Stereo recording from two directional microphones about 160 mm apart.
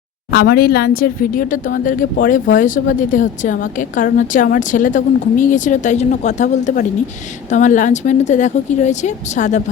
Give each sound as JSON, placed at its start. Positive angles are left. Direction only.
{"t": 0.3, "sound": "speech", "side_deg": 75}